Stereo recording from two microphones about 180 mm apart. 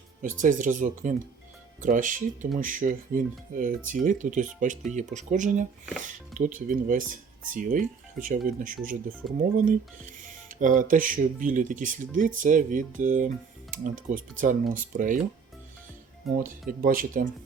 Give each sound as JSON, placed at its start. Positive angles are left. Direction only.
{"t": 0.2, "sound": "speech", "side_deg": -45}
{"t": 9.2, "sound": "speech", "side_deg": 0}
{"t": 9.6, "sound": "speech", "side_deg": -45}
{"t": 16.4, "sound": "speech", "side_deg": -50}